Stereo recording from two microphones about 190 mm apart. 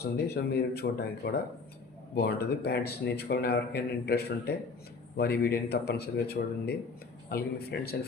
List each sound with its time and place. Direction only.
0.0 s a man's voice: 60° left (ahead or behind)